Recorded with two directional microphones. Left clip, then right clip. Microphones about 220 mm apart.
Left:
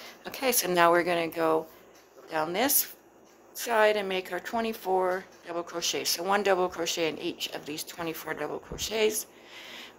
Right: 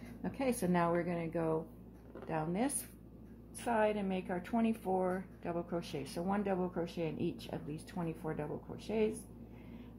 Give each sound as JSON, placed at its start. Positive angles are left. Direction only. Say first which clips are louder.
{"t": 0.2, "sound": "speech", "louder": "left 8 dB", "side_deg": 25}